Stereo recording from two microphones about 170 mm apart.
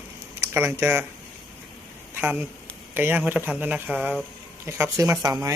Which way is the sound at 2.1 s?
10° right (ahead or behind).